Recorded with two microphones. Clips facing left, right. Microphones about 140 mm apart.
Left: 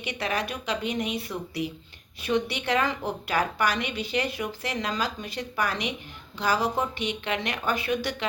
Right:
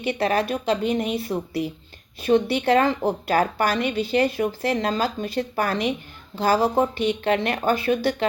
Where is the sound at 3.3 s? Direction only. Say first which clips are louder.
Right 3 dB; 50° right (ahead or behind).